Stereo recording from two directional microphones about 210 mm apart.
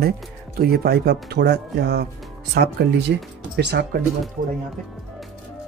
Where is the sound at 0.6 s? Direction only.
45° right (ahead or behind).